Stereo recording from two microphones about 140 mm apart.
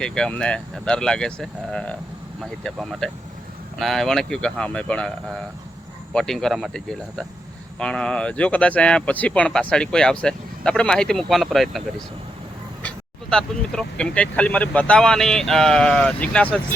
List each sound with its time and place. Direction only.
0.0 s speech: 5° left (ahead or behind)
13.3 s speech: 5° left (ahead or behind)